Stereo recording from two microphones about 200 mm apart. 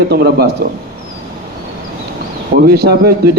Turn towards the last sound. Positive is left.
turn(degrees=-50)  # may be behind; listen again after turning